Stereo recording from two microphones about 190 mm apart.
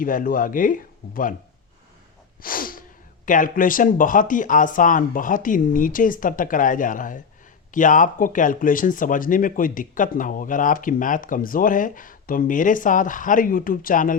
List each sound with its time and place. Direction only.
0.0 s speech: 45° left (ahead or behind)
2.4 s sneeze: 50° left (ahead or behind)
3.2 s speech: 45° left (ahead or behind)